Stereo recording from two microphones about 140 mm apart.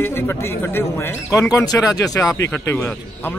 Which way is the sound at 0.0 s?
15° left (ahead or behind).